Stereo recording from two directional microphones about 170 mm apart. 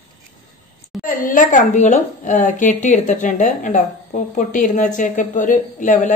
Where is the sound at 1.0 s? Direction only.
50° left (ahead or behind).